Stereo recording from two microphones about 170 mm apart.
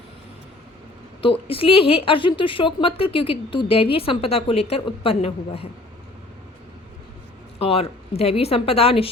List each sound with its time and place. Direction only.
1.5 s a woman's voice: 35° left (ahead or behind)
7.6 s a woman's voice: 35° left (ahead or behind)